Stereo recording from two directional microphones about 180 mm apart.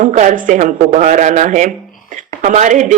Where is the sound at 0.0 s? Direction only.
45° right (ahead or behind).